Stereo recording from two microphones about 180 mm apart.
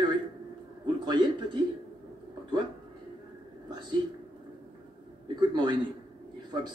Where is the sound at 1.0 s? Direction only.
25° right (ahead or behind).